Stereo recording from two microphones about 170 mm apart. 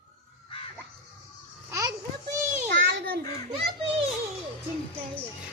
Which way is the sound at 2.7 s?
90° right.